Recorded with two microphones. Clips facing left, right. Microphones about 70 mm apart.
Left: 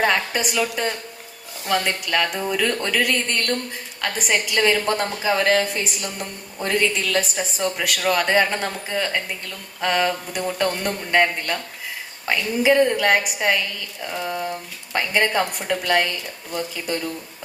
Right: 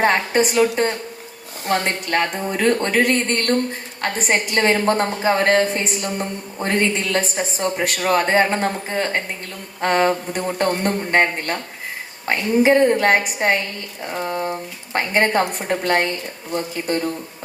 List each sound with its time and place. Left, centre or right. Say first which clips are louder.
0.0 s speech: right 4 dB; right